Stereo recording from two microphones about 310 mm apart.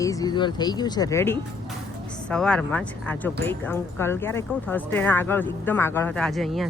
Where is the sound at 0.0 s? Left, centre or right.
Centre.